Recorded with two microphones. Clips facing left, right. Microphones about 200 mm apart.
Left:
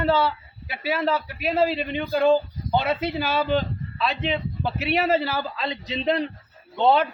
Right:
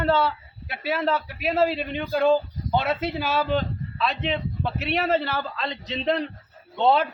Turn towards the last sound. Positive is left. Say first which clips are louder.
# left 1 dB
turn(degrees=0)  # may be behind; listen again after turning